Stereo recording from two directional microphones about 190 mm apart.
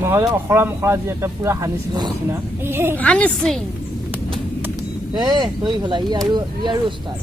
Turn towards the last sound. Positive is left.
turn(degrees=-25)  # may be behind; listen again after turning